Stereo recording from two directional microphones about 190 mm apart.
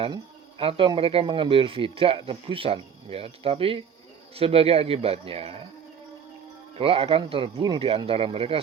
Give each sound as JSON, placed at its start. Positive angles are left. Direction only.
{"t": 0.6, "sound": "speech", "side_deg": -30}
{"t": 6.7, "sound": "speech", "side_deg": -30}